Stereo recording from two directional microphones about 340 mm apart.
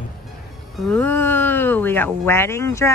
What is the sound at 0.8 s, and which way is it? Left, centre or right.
Speech, centre.